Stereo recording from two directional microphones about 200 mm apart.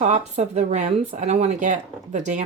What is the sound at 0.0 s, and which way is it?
Speech, 35° right (ahead or behind).